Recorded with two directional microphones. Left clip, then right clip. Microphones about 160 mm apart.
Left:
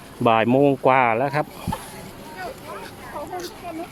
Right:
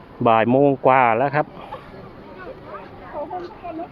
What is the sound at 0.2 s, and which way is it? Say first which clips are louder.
Speech: right 2 dB; 20° left (ahead or behind).